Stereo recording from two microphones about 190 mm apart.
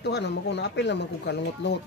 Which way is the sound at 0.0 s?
60° left (ahead or behind).